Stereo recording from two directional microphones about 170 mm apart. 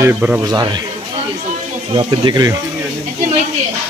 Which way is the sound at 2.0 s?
25° right (ahead or behind).